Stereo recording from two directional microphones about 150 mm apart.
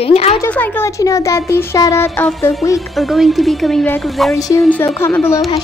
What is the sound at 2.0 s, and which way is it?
Speech, 5° left (ahead or behind).